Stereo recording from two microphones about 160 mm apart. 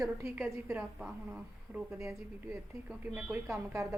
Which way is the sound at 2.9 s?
5° right (ahead or behind).